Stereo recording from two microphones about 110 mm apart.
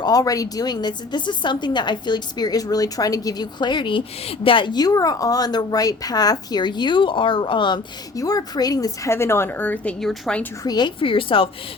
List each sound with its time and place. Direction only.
0.0 s a woman's voice: 35° left (ahead or behind)
8.1 s a woman's voice: 35° left (ahead or behind)
9.1 s speech: 25° left (ahead or behind); by 10.4 s 5° left (ahead or behind)
10.6 s a woman's voice: 40° left (ahead or behind)